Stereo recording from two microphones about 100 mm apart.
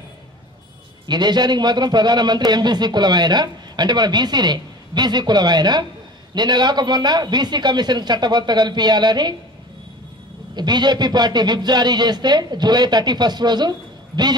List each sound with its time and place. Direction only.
1.0 s speech: 45° right (ahead or behind)
10.5 s speech: 45° right (ahead or behind)